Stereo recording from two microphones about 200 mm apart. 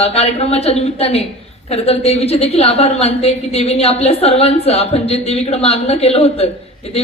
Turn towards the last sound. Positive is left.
turn(degrees=30)  # may be behind; listen again after turning